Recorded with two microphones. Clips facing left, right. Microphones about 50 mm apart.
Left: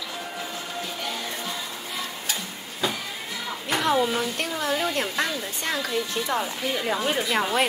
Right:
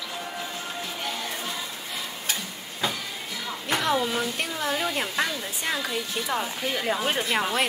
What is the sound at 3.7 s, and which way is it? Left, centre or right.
Speech, centre.